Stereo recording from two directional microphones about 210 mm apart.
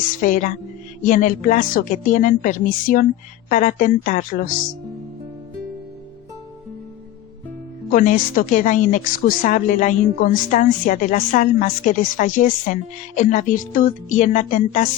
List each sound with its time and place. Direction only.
0.2 s speech: 35° left (ahead or behind)
7.9 s speech: 40° left (ahead or behind)